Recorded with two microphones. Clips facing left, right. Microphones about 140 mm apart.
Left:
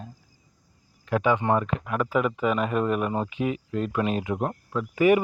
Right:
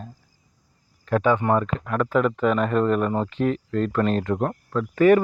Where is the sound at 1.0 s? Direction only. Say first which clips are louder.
Right 3 dB; 15° left (ahead or behind).